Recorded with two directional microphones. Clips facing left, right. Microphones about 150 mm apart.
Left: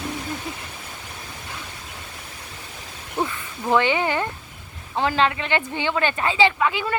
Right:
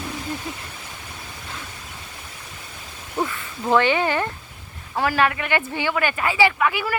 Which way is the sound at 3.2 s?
25° left (ahead or behind).